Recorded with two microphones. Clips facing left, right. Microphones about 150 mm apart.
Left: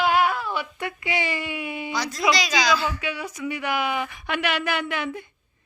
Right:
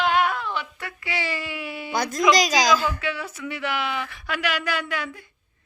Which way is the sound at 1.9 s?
50° right (ahead or behind).